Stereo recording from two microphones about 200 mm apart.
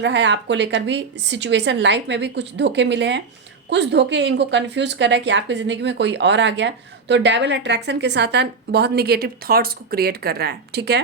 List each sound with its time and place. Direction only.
0.0 s a woman's voice: 60° right (ahead or behind)